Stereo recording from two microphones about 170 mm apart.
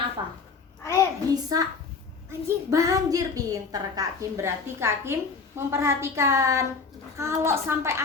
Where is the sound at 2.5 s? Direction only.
20° right (ahead or behind).